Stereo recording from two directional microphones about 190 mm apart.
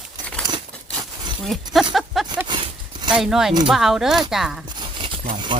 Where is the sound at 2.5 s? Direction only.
25° right (ahead or behind).